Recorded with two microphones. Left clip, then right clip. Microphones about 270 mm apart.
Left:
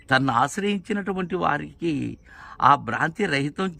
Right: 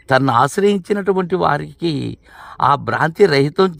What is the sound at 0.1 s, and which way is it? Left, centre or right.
Speech, centre.